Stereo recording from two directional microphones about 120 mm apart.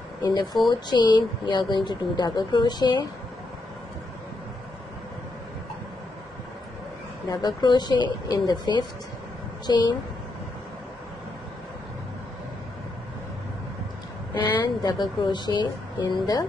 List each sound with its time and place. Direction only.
0.2 s a woman's voice: 35° left (ahead or behind)
7.2 s a woman's voice: 35° left (ahead or behind)
14.3 s a woman's voice: 40° left (ahead or behind)